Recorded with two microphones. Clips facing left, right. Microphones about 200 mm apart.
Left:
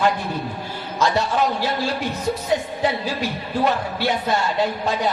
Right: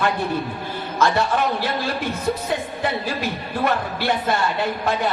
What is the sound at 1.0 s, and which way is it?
Speech, 55° right (ahead or behind).